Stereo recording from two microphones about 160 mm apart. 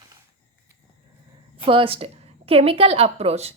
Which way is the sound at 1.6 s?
35° right (ahead or behind).